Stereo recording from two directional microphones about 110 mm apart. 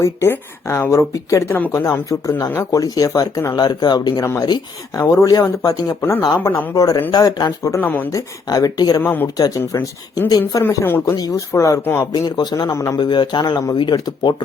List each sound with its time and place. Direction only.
0.0 s a woman's voice: 25° left (ahead or behind)
1.5 s a woman's voice: 15° left (ahead or behind)
1.8 s speech: 30° left (ahead or behind)
4.9 s speech: 30° left (ahead or behind)
6.0 s a woman's voice: 20° left (ahead or behind)
7.1 s a woman's voice: 35° left (ahead or behind); by 8.1 s 15° left (ahead or behind)
8.1 s speech: 35° left (ahead or behind)
9.0 s a woman's voice: 20° left (ahead or behind)
10.7 s a woman's voice: 25° left (ahead or behind)
12.7 s a woman's voice: 25° left (ahead or behind)
13.0 s speech: 45° left (ahead or behind)